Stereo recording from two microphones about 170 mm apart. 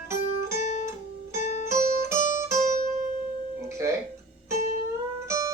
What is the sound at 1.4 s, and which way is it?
Music, 45° left (ahead or behind).